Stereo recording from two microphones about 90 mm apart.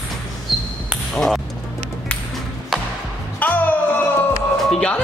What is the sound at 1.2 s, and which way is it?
Speech, 5° left (ahead or behind).